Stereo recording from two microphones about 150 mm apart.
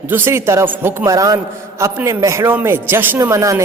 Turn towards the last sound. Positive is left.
turn(degrees=-20)  # may be behind; listen again after turning